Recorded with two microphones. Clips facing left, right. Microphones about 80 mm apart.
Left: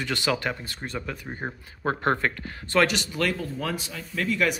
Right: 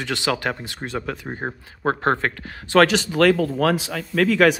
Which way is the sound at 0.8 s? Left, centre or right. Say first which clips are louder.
Right 6 dB; right.